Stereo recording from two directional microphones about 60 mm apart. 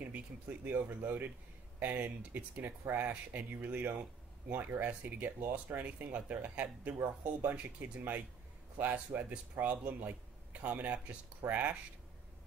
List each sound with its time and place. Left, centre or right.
0.0 s speech: right